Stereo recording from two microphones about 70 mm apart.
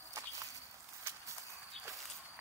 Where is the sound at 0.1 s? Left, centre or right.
Right.